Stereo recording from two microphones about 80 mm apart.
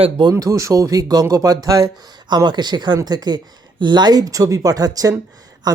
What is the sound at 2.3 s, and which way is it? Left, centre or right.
Speech, right.